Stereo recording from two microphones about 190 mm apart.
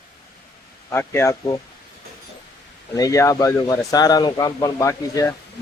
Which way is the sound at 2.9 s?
20° left (ahead or behind).